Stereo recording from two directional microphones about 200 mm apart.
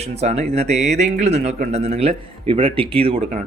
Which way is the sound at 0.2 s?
30° right (ahead or behind).